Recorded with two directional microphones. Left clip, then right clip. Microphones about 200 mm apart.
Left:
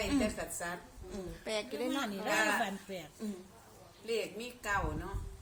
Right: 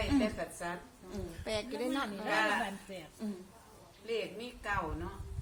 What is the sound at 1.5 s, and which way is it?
Speech, 10° right (ahead or behind).